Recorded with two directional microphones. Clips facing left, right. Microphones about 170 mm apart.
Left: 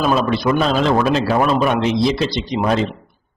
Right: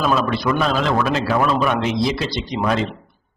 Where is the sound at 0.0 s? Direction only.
20° left (ahead or behind).